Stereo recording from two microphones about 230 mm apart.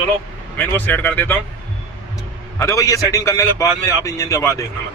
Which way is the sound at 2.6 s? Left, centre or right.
Centre.